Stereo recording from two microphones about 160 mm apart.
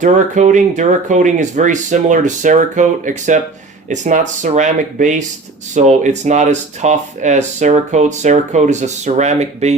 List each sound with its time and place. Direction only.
0.0 s speech: 50° right (ahead or behind)